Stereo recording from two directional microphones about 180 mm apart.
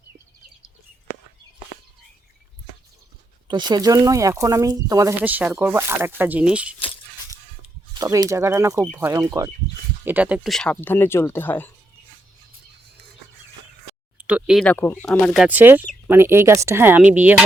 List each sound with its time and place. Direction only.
3.5 s speech: 25° right (ahead or behind); by 6.7 s 5° right (ahead or behind)
7.9 s speech: 20° right (ahead or behind); by 11.7 s 10° left (ahead or behind)
14.2 s a sound: 5° right (ahead or behind)
14.6 s speech: 10° left (ahead or behind)
15.3 s speech: 5° right (ahead or behind)